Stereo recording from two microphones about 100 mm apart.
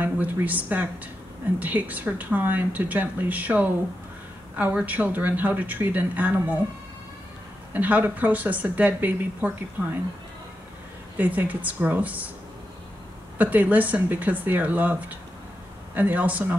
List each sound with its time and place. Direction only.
0.0 s speech: 15° right (ahead or behind)
7.7 s speech: 15° right (ahead or behind)
11.1 s speech: 15° right (ahead or behind)
13.4 s speech: 15° right (ahead or behind)